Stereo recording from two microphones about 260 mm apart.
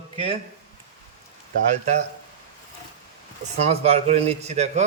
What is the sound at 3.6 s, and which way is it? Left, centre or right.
A man's voice, right.